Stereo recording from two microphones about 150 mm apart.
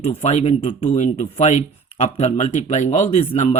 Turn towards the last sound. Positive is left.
turn(degrees=45)  # may be behind; listen again after turning